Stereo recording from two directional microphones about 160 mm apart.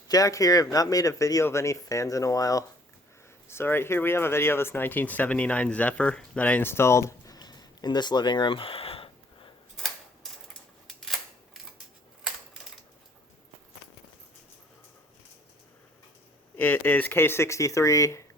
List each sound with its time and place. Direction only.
0.1 s speech: 20° left (ahead or behind); by 9.5 s 35° left (ahead or behind)
9.7 s a sound: centre (ahead or behind)
10.8 s camera: centre (ahead or behind)
16.6 s speech: 10° left (ahead or behind)